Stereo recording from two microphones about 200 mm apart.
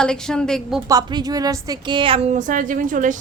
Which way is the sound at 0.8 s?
20° right (ahead or behind).